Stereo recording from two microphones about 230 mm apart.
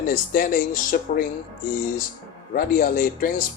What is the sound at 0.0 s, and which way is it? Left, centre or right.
Speech, left.